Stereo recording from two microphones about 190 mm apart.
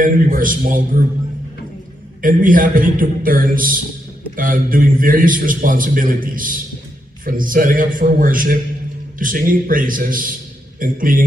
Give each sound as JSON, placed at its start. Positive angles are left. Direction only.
{"t": 0.0, "sound": "a man's voice", "side_deg": -45}
{"t": 2.2, "sound": "a man's voice", "side_deg": -45}